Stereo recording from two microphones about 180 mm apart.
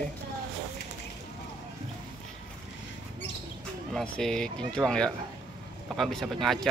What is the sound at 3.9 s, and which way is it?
Speech, 5° left (ahead or behind).